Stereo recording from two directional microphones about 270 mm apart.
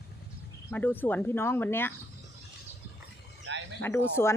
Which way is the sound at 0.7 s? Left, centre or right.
Centre.